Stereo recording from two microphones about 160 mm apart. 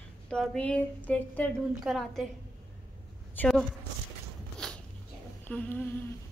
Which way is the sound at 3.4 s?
10° left (ahead or behind).